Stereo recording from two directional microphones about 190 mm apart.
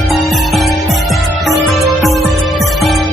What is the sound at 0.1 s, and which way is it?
Music, centre (ahead or behind).